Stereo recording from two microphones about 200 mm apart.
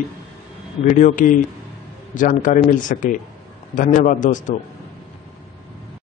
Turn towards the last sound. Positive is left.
turn(degrees=40)  # may be behind; listen again after turning